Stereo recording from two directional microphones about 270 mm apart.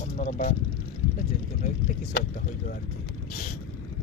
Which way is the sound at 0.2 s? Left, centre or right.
Left.